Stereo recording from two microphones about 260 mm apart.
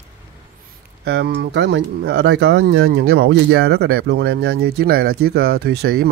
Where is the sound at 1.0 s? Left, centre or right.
Right.